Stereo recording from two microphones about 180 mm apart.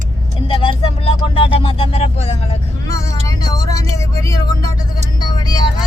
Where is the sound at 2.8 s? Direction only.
20° left (ahead or behind).